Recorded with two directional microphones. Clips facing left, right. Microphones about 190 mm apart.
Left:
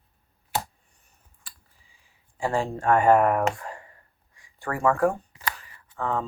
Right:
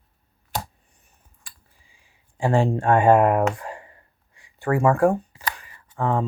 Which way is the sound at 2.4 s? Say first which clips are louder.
Right 5 dB; 25° right (ahead or behind).